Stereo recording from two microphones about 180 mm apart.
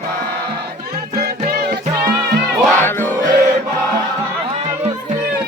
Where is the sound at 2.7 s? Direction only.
10° left (ahead or behind).